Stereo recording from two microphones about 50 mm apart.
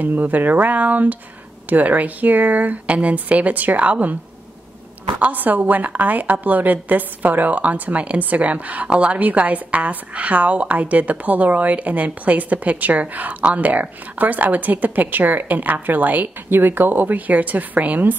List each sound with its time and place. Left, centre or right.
0.0 s speech: right
5.2 s speech: right